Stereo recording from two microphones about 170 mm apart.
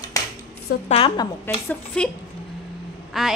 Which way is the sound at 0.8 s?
35° left (ahead or behind).